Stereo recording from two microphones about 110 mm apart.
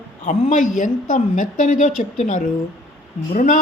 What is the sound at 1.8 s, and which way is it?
Speech, 90° left.